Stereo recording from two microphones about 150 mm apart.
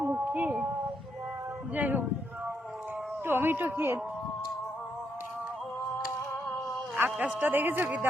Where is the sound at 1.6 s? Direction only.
10° right (ahead or behind).